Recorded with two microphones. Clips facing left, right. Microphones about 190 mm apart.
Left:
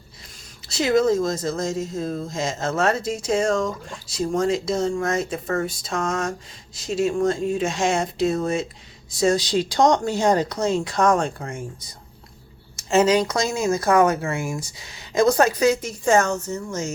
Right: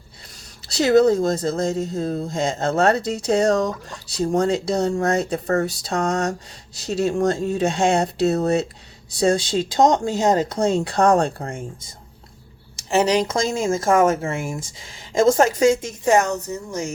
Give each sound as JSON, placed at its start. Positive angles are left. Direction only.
{"t": 0.7, "sound": "speech", "side_deg": -35}
{"t": 12.9, "sound": "speech", "side_deg": -20}